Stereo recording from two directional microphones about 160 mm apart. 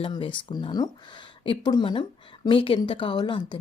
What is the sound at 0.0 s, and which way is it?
Speech, 30° left (ahead or behind).